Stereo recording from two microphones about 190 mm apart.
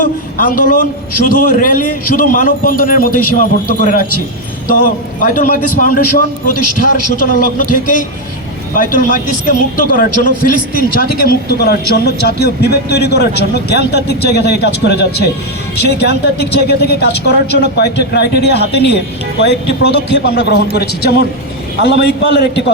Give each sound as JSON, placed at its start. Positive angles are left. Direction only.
{"t": 0.0, "sound": "a man's voice", "side_deg": 45}
{"t": 5.2, "sound": "a man's voice", "side_deg": 45}